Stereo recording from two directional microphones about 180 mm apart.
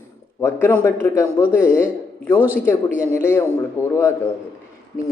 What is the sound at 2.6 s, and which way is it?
A man's voice, 15° left (ahead or behind).